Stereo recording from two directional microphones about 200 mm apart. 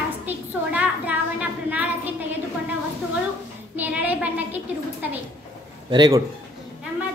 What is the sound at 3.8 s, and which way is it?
Speech, 10° right (ahead or behind).